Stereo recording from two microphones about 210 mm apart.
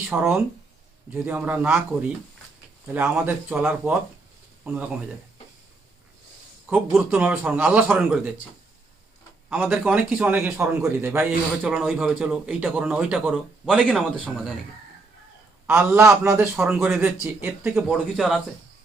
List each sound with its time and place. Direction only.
0.1 s a man's voice: 5° right (ahead or behind)
6.7 s a man's voice: 5° right (ahead or behind)
9.5 s a man's voice: 5° right (ahead or behind)
15.6 s a man's voice: 10° right (ahead or behind)